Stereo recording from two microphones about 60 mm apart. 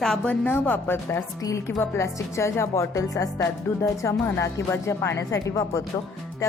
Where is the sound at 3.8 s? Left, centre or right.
Left.